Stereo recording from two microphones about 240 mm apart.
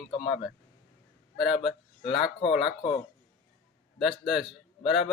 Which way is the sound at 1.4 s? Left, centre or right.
Centre.